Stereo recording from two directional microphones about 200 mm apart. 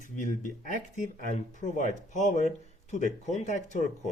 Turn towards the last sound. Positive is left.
turn(degrees=35)  # may be behind; listen again after turning